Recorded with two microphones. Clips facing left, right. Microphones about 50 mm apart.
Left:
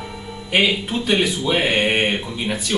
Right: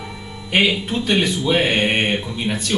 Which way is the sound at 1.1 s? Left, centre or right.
Centre.